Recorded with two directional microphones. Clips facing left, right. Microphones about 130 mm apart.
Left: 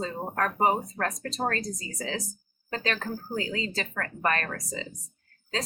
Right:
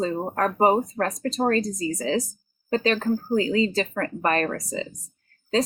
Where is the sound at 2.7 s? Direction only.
20° right (ahead or behind).